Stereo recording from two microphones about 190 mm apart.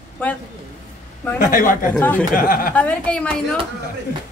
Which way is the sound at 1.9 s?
10° left (ahead or behind).